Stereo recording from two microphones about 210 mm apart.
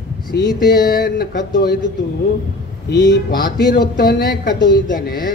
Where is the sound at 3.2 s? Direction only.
45° left (ahead or behind).